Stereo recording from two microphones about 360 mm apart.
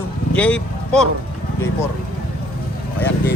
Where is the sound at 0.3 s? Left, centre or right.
Centre.